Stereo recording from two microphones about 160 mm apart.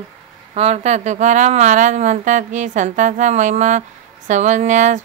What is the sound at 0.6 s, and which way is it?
A woman's voice, 45° right (ahead or behind).